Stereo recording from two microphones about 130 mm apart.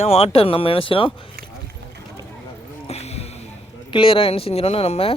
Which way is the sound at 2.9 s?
55° left (ahead or behind).